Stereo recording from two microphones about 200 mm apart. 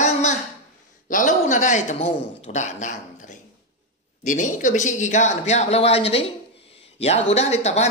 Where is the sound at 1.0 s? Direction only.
40° left (ahead or behind).